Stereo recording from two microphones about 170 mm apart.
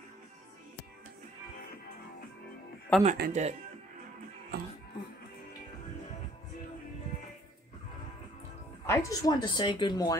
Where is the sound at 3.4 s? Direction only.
45° right (ahead or behind).